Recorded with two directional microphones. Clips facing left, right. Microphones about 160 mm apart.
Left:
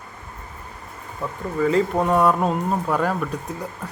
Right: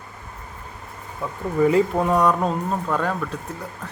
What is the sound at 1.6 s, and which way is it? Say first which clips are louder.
Speech: right 3 dB; 20° right (ahead or behind).